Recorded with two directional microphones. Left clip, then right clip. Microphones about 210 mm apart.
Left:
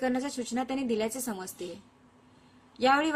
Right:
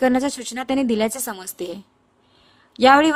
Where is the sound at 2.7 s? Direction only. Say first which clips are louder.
Right 12 dB; 55° right (ahead or behind).